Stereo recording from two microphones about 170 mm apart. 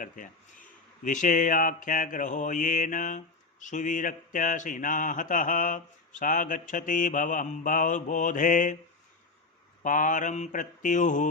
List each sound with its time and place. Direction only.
0.0 s speech: 50° left (ahead or behind)
9.8 s speech: 50° left (ahead or behind)